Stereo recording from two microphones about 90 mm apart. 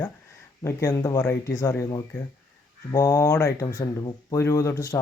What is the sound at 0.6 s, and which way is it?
Speech, 35° left (ahead or behind).